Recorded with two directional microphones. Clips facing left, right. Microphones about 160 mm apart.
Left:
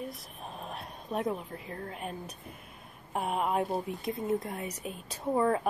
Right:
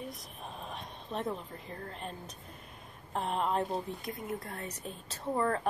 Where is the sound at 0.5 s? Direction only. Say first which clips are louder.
Left 2 dB; 5° left (ahead or behind).